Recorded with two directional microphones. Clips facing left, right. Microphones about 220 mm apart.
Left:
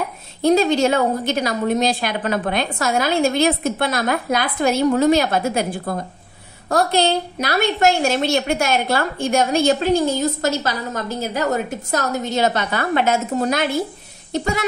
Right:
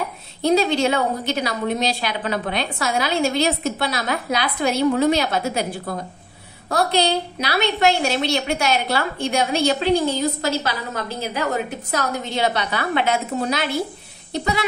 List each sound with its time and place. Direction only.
0.4 s a woman's voice: 45° left (ahead or behind)